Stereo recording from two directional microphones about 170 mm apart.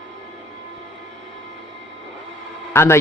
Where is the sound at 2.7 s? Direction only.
15° left (ahead or behind).